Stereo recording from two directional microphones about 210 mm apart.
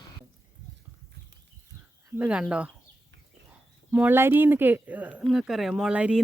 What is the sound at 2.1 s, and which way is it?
Speech, 5° right (ahead or behind).